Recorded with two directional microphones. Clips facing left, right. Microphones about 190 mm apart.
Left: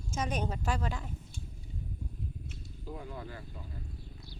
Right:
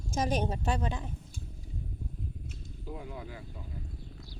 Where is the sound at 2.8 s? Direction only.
10° right (ahead or behind).